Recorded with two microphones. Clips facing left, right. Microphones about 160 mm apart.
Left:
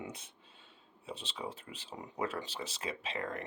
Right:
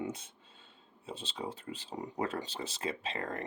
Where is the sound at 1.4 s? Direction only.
40° right (ahead or behind).